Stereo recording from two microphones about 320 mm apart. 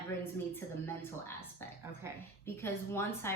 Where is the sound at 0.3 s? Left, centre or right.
Centre.